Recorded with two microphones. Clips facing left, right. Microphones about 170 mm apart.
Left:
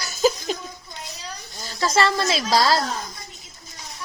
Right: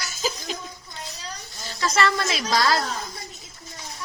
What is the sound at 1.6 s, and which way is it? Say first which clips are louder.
A woman's voice: left 2 dB; 35° left (ahead or behind).